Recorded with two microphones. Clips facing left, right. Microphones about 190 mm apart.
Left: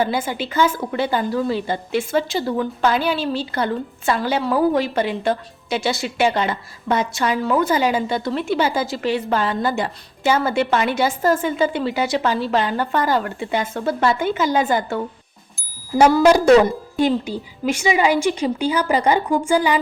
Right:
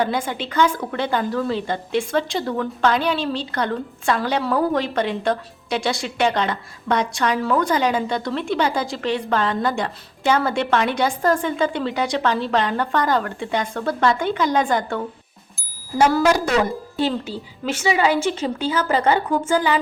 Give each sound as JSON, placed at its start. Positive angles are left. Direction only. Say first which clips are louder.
{"t": 0.0, "sound": "a woman's voice", "louder": "left 1 dB", "side_deg": 5}
{"t": 16.2, "sound": "speech", "louder": "left 6 dB", "side_deg": 30}
{"t": 17.0, "sound": "a woman's voice", "louder": "left 4 dB", "side_deg": 15}